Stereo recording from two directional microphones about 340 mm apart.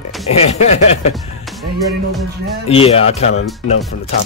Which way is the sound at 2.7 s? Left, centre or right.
Centre.